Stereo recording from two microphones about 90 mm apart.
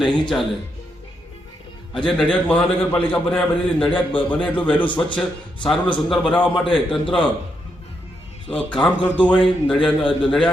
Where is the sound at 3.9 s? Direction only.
70° left (ahead or behind).